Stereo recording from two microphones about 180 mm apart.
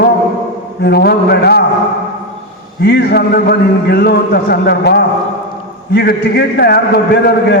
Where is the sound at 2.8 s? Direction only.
65° left (ahead or behind).